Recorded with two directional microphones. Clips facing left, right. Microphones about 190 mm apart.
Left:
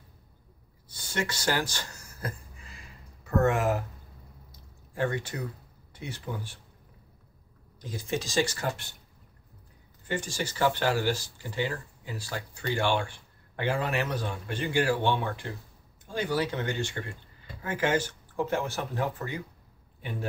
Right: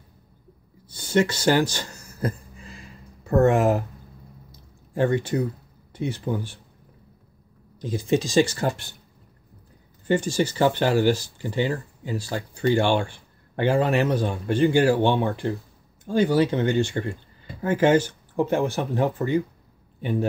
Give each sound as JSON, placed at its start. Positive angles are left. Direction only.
{"t": 1.1, "sound": "a sound", "side_deg": -25}
{"t": 3.3, "sound": "speech", "side_deg": -30}
{"t": 4.9, "sound": "speech", "side_deg": -30}
{"t": 7.9, "sound": "speech", "side_deg": -20}
{"t": 10.0, "sound": "speech", "side_deg": -30}